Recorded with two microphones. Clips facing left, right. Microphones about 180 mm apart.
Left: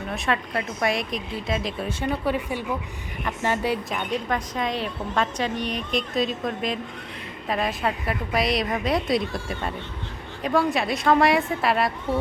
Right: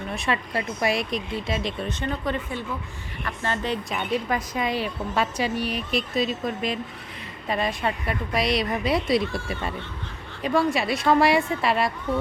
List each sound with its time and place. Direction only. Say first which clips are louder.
0.1 s a woman's voice: left 1 dB; centre (ahead or behind)
3.9 s a woman's voice: right 1 dB; 5° right (ahead or behind)
12.1 s speech: left 1 dB; 30° left (ahead or behind)